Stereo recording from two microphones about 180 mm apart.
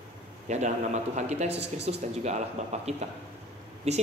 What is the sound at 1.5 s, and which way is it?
Speech, 70° right (ahead or behind).